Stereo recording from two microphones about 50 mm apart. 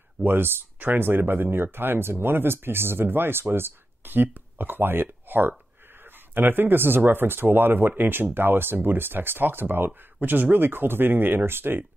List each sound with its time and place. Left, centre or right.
0.2 s speech: right